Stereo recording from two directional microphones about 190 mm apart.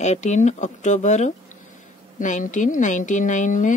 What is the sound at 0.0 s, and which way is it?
A woman's voice, 40° left (ahead or behind).